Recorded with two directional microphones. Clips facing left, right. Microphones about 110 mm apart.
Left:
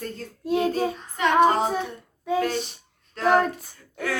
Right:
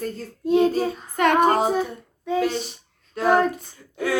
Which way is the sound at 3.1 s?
10° right (ahead or behind).